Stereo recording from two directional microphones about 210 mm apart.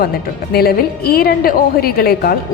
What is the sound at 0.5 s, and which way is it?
A woman's voice, 50° left (ahead or behind).